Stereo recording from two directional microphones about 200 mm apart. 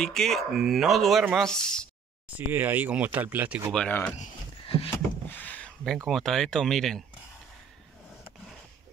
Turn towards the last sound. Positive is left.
turn(degrees=0)  # may be behind; listen again after turning